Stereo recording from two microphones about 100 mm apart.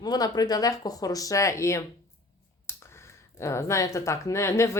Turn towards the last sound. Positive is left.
turn(degrees=30)  # may be behind; listen again after turning